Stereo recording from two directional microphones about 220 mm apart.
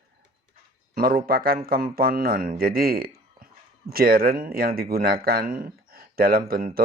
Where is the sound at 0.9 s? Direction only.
40° right (ahead or behind).